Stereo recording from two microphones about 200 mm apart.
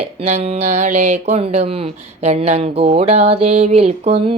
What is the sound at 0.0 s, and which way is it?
Speech, 30° right (ahead or behind).